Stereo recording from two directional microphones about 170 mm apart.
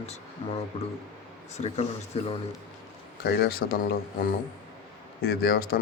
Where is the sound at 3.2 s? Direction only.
70° left (ahead or behind).